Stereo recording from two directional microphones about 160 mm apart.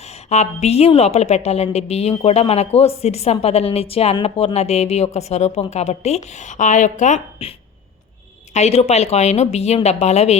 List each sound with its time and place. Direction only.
0.3 s a woman's voice: 45° left (ahead or behind)
8.5 s a woman's voice: 40° left (ahead or behind)